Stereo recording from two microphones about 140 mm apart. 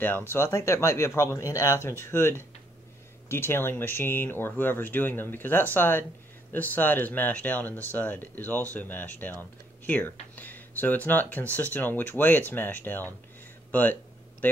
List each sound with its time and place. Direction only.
0.0 s speech: 15° left (ahead or behind)